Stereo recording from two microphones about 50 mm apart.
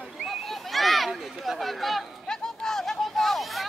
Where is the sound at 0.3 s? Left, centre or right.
Centre.